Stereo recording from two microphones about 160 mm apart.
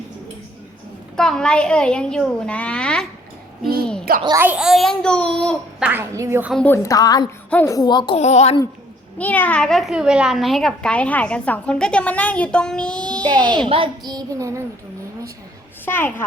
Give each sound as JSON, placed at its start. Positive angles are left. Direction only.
{"t": 1.1, "sound": "a child's voice", "side_deg": 5}
{"t": 4.4, "sound": "a child's voice", "side_deg": -10}
{"t": 5.8, "sound": "a woman's voice", "side_deg": -15}
{"t": 6.5, "sound": "a child's voice", "side_deg": 5}
{"t": 6.7, "sound": "a woman's voice", "side_deg": 20}
{"t": 8.2, "sound": "a woman's voice", "side_deg": 45}
{"t": 9.1, "sound": "a child's voice", "side_deg": 10}
{"t": 13.2, "sound": "a child's voice", "side_deg": -30}
{"t": 15.9, "sound": "a child's voice", "side_deg": 15}